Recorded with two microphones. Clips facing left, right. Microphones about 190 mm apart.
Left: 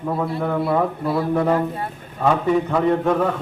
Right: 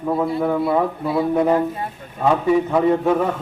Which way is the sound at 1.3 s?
15° right (ahead or behind).